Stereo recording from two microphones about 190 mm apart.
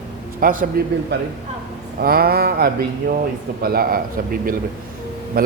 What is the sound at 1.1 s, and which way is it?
Speech, 65° right (ahead or behind).